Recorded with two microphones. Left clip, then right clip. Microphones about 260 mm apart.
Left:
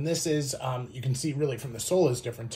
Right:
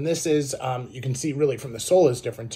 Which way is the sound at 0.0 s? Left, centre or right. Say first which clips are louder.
Right 6 dB; right.